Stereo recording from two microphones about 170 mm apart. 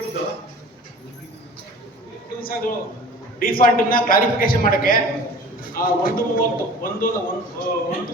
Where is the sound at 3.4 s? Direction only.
55° left (ahead or behind).